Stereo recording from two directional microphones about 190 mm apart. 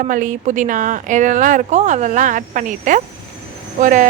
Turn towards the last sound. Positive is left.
turn(degrees=-40)  # may be behind; listen again after turning